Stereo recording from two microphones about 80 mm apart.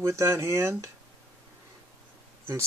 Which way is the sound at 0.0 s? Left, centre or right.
Right.